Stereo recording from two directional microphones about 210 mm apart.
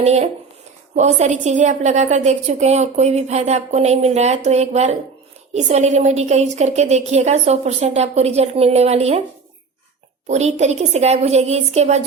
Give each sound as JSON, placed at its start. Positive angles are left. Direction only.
{"t": 0.0, "sound": "a woman's voice", "side_deg": -30}
{"t": 10.2, "sound": "a woman's voice", "side_deg": -30}